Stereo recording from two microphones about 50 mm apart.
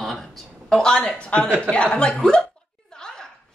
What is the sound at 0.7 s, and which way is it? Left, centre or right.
Speech, centre.